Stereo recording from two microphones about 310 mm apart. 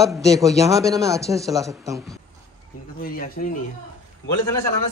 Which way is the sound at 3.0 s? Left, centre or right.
Left.